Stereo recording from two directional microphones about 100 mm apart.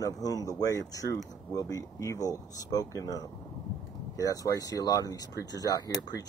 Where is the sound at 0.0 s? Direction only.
40° left (ahead or behind).